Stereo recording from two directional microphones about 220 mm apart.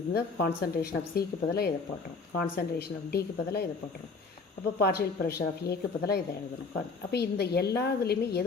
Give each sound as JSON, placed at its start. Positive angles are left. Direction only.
{"t": 0.1, "sound": "a woman's voice", "side_deg": 45}
{"t": 4.8, "sound": "a woman's voice", "side_deg": 45}